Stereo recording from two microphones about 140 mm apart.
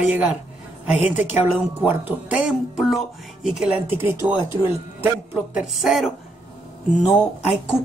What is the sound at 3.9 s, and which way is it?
Speech, 15° right (ahead or behind).